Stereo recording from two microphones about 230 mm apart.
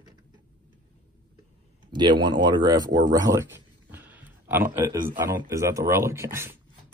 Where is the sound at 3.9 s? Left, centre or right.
Centre.